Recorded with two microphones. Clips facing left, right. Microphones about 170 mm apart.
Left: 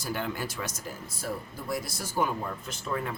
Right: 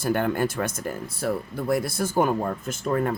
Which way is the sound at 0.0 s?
55° right (ahead or behind).